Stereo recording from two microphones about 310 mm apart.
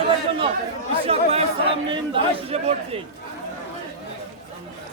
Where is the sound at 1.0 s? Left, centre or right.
Centre.